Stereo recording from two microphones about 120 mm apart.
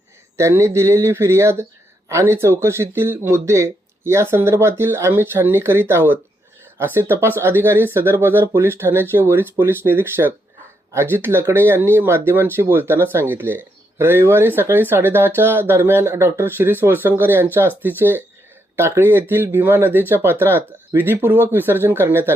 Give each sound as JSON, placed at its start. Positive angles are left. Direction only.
{"t": 0.3, "sound": "speech", "side_deg": -25}